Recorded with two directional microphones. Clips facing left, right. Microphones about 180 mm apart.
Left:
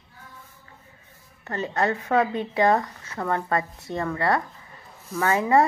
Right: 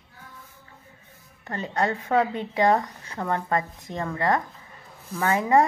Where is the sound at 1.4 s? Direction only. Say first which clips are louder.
Left 1 dB; 15° right (ahead or behind).